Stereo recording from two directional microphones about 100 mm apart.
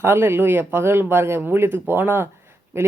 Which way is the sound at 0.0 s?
25° right (ahead or behind).